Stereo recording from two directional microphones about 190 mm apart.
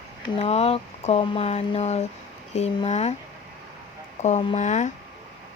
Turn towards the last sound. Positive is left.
turn(degrees=40)  # may be behind; listen again after turning